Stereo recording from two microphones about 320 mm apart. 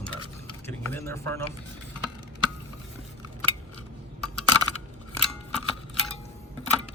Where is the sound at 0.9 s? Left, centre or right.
Centre.